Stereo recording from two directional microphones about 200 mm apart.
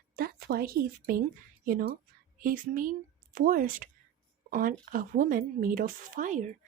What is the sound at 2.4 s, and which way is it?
Speech, 45° right (ahead or behind).